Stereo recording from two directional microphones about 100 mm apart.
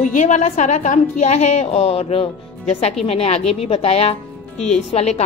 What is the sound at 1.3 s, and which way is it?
Speech, 90° left.